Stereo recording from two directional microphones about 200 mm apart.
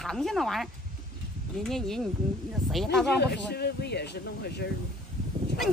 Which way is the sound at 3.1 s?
55° left (ahead or behind).